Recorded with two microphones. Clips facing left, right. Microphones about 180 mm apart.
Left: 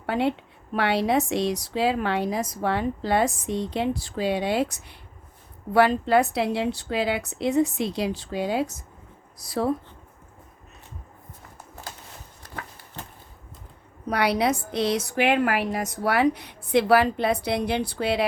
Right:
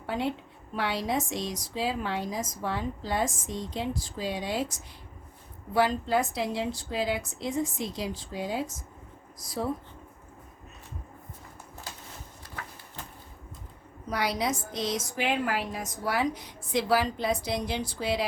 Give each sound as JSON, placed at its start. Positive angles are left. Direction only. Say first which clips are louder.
{"t": 0.0, "sound": "a woman's voice", "louder": "left 6 dB", "side_deg": 70}
{"t": 14.1, "sound": "a woman's voice", "louder": "left 6 dB", "side_deg": 65}